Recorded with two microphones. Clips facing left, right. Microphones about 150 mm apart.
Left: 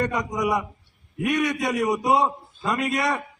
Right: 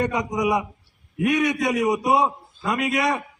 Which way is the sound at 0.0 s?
15° right (ahead or behind).